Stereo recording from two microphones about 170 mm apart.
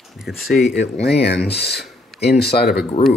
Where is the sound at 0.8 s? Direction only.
80° left.